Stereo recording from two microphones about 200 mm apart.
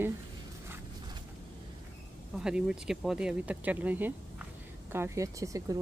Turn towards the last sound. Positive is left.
turn(degrees=-15)  # may be behind; listen again after turning